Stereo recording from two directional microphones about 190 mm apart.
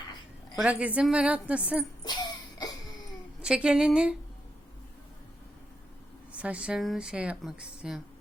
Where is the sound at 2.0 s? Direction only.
20° left (ahead or behind).